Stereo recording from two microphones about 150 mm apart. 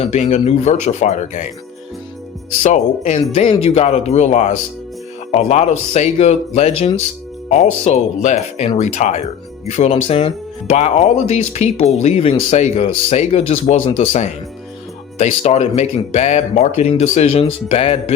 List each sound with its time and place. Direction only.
0.0 s speech: 50° left (ahead or behind)
2.6 s speech: 55° left (ahead or behind)
3.4 s speech: 35° left (ahead or behind)